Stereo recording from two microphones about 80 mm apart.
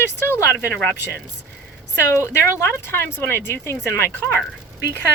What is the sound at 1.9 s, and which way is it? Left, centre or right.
Speech, left.